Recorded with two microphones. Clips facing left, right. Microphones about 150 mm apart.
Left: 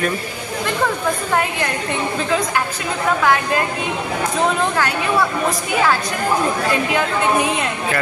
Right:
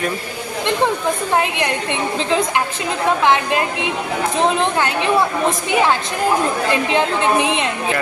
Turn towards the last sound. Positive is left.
turn(degrees=-20)  # may be behind; listen again after turning